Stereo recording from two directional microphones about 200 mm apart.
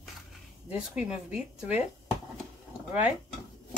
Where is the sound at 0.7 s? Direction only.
5° right (ahead or behind).